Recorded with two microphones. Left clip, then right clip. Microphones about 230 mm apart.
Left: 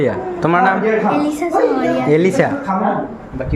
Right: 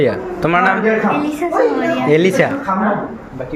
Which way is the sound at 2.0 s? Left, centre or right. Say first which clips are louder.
Right 2 dB; centre.